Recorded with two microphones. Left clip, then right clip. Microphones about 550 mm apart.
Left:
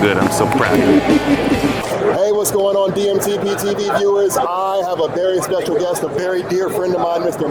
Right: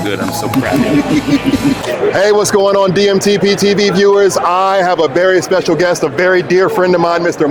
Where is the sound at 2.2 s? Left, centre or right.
Right.